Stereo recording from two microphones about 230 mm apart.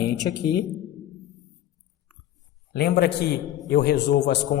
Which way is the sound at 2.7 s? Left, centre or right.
Left.